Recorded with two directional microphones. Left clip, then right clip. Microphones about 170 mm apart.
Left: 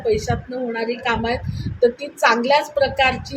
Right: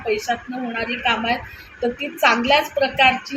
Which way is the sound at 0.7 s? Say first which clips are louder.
Right 1 dB; 20° left (ahead or behind).